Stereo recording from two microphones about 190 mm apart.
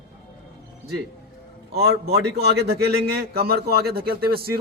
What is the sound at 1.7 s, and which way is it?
A man's voice, 55° right (ahead or behind).